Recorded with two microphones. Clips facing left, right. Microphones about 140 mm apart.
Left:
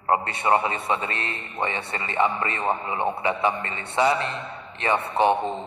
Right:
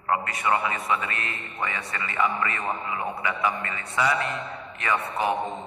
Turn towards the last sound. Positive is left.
turn(degrees=30)  # may be behind; listen again after turning